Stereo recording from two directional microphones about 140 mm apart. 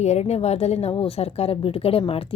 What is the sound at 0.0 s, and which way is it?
A woman's voice, 50° left (ahead or behind).